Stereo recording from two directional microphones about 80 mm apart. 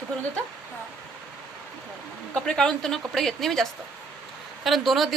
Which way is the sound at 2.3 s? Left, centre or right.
Centre.